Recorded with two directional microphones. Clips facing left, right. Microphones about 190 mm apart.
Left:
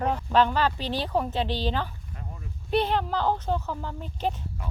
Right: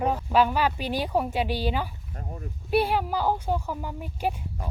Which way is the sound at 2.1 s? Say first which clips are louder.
Right 5 dB; 40° right (ahead or behind).